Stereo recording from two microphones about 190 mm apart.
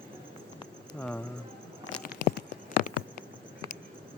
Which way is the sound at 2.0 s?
55° left (ahead or behind).